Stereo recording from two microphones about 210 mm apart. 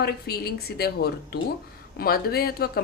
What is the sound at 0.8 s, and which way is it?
A woman's voice, 50° left (ahead or behind).